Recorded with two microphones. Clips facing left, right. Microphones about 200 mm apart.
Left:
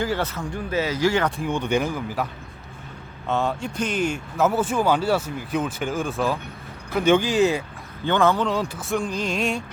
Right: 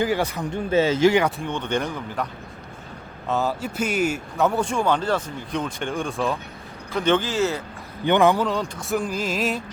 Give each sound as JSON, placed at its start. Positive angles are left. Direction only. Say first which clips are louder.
{"t": 0.0, "sound": "a man's voice", "louder": "right 2 dB", "side_deg": -15}
{"t": 1.4, "sound": "speech", "louder": "left 2 dB", "side_deg": 10}
{"t": 3.2, "sound": "speech", "louder": "even", "side_deg": 0}
{"t": 4.4, "sound": "speech", "louder": "left 1 dB", "side_deg": 5}
{"t": 8.0, "sound": "a man's voice", "louder": "right 2 dB", "side_deg": -15}
{"t": 8.4, "sound": "speech", "louder": "even", "side_deg": 5}